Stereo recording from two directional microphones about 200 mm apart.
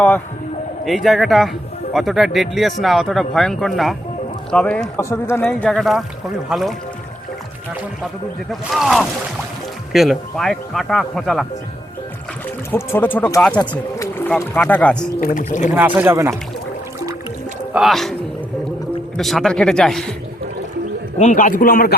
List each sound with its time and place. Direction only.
0.9 s a man's voice: centre (ahead or behind)
8.4 s a man's voice: centre (ahead or behind)
12.7 s speech: 10° left (ahead or behind)
15.4 s a man's voice: 35° left (ahead or behind)
15.7 s speech: 10° right (ahead or behind)
17.7 s a man's voice: centre (ahead or behind)
19.1 s a man's voice: centre (ahead or behind)
21.2 s a man's voice: 40° left (ahead or behind)